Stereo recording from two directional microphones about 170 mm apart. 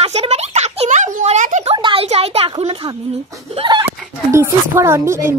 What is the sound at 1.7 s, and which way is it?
Speech, 30° right (ahead or behind).